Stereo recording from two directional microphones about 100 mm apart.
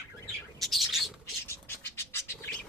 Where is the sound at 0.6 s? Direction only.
Centre (ahead or behind).